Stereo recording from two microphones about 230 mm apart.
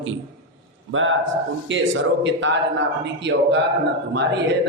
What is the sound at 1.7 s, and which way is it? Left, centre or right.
Speech, right.